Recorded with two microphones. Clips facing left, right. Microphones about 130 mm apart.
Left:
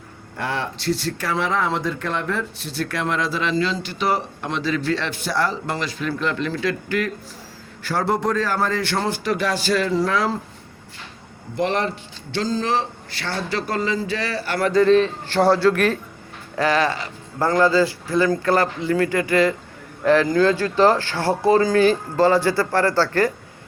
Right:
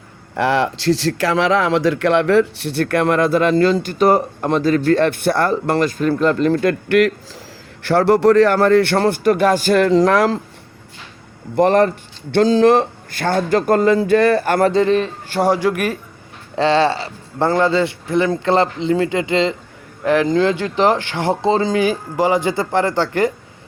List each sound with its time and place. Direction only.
0.3 s speech: 90° right
11.5 s a man's voice: 50° right (ahead or behind)
12.3 s a man's voice: 65° right (ahead or behind); by 14.7 s 50° right (ahead or behind)
14.7 s speech: 25° right (ahead or behind)
15.3 s a man's voice: 10° right (ahead or behind)
16.6 s speech: 25° right (ahead or behind)